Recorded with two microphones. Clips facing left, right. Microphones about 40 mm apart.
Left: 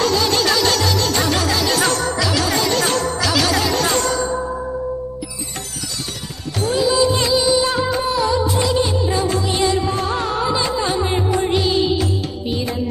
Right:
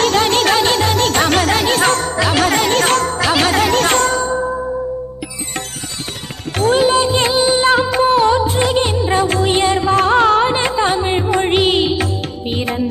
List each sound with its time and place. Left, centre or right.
0.0 s music: right
6.5 s music: right
9.9 s music: right
10.5 s music: right
11.3 s music: right
12.4 s music: right